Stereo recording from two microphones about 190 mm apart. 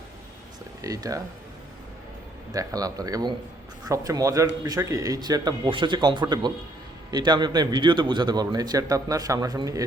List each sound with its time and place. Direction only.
0.8 s speech: 20° right (ahead or behind)
2.5 s a man's voice: 20° right (ahead or behind)